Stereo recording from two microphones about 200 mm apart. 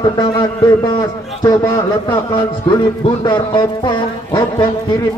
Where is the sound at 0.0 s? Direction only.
20° left (ahead or behind).